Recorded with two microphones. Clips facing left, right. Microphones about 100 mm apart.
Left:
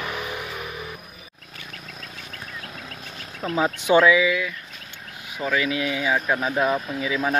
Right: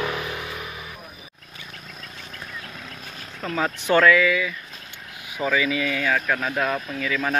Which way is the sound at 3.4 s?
15° left (ahead or behind).